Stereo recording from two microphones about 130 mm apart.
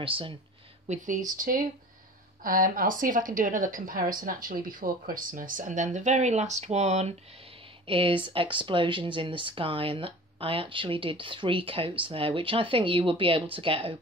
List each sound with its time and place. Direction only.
0.0 s speech: 45° right (ahead or behind)
0.8 s speech: 75° right (ahead or behind)
1.3 s a woman's voice: 90° right; by 7.2 s 60° right (ahead or behind)
7.8 s speech: 45° right (ahead or behind)